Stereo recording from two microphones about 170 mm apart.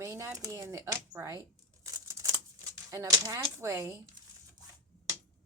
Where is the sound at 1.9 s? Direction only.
20° right (ahead or behind).